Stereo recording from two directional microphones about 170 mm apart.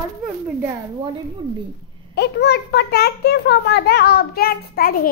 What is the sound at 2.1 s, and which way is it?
A child's voice, 75° left (ahead or behind).